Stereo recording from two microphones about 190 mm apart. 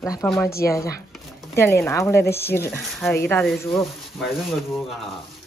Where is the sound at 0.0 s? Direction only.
20° left (ahead or behind).